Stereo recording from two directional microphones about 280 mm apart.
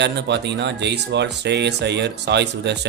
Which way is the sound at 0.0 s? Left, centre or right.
Right.